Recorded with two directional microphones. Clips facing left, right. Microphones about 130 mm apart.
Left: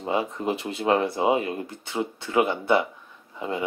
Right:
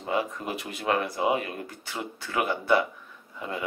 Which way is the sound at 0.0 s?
25° left (ahead or behind).